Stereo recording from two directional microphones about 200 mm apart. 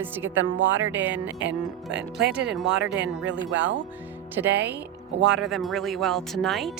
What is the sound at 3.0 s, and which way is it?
Speech, 65° right (ahead or behind).